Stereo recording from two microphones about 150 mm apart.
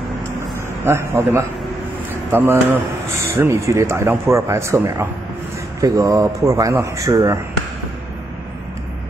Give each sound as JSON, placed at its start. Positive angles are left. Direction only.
{"t": 0.8, "sound": "a man's voice", "side_deg": -15}